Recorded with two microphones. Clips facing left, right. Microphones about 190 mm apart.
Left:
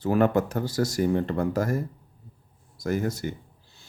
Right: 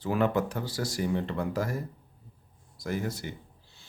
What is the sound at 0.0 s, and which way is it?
A man's voice, 45° left (ahead or behind).